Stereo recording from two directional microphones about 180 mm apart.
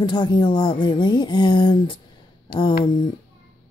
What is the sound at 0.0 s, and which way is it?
Speech, 25° left (ahead or behind).